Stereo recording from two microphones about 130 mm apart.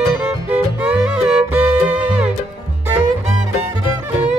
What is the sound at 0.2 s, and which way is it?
Music, 10° right (ahead or behind).